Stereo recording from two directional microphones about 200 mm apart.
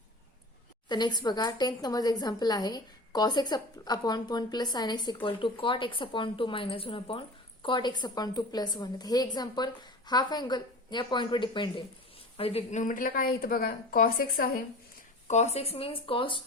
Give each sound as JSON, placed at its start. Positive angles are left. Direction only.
{"t": 0.9, "sound": "a woman's voice", "side_deg": 20}
{"t": 15.3, "sound": "a woman's voice", "side_deg": 35}